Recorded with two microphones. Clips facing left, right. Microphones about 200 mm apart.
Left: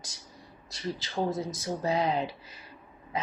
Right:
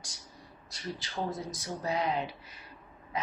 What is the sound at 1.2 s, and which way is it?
Speech, 25° left (ahead or behind).